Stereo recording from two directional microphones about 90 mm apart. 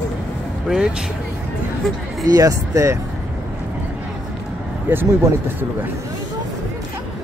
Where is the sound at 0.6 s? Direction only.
10° right (ahead or behind).